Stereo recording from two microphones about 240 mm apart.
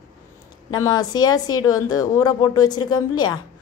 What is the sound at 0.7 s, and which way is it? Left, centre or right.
A woman's voice, centre.